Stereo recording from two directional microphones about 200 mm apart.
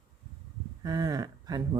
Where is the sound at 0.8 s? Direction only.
20° right (ahead or behind).